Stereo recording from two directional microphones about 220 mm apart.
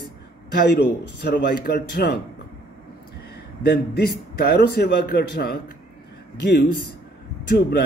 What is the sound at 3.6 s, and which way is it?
A man's voice, 45° left (ahead or behind).